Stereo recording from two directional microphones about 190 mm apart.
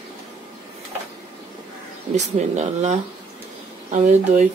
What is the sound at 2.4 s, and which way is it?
Speech, 35° right (ahead or behind).